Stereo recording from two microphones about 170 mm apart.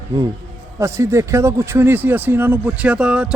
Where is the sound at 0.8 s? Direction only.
15° right (ahead or behind).